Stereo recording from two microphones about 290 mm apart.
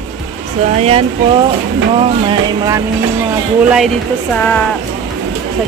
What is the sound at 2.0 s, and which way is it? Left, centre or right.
Vehicle, centre.